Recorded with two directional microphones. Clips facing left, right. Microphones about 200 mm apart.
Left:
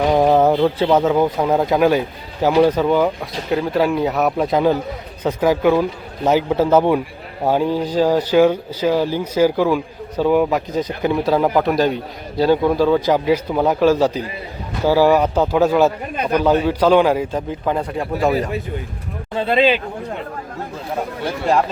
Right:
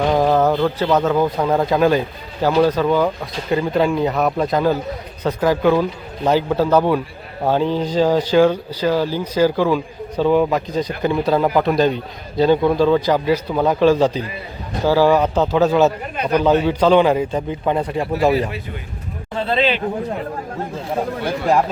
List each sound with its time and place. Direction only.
0.0 s a sound: 10° left (ahead or behind)
0.9 s a man's voice: 10° left (ahead or behind)
19.4 s a man's voice: 10° left (ahead or behind)